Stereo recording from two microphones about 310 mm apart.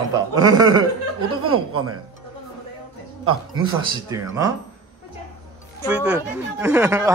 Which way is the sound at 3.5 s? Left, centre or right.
Centre.